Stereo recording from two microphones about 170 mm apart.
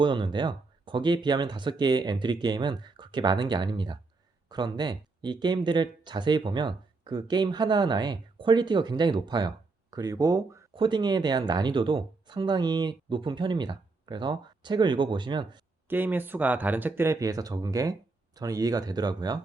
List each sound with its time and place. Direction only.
0.0 s speech: 30° right (ahead or behind)
15.9 s speech: 10° right (ahead or behind)